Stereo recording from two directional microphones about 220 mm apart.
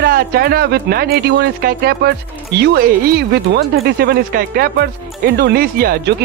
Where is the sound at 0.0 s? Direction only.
45° right (ahead or behind).